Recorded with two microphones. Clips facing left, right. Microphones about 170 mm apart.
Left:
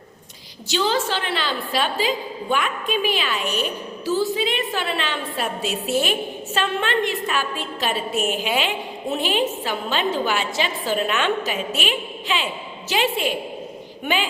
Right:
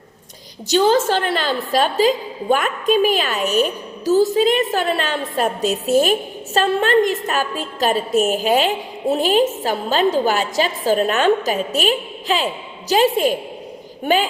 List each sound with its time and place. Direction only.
0.7 s a woman's voice: 45° right (ahead or behind)